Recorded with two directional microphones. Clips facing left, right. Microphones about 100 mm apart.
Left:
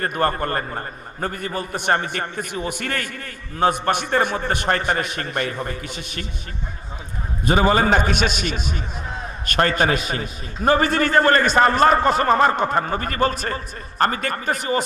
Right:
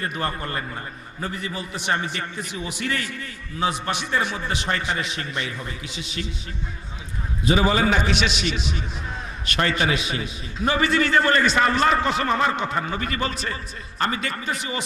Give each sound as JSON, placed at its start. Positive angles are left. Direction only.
{"t": 0.0, "sound": "a man's voice", "side_deg": 50}
{"t": 7.4, "sound": "a man's voice", "side_deg": 50}